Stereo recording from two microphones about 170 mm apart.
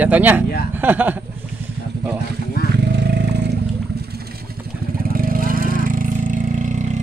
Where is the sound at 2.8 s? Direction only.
75° right (ahead or behind).